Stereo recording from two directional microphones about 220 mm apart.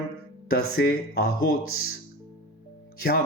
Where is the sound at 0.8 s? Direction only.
45° left (ahead or behind).